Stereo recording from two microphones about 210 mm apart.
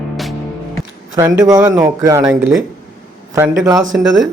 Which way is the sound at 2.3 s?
5° right (ahead or behind).